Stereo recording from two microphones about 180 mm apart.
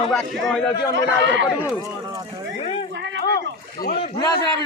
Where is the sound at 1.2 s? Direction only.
90° right.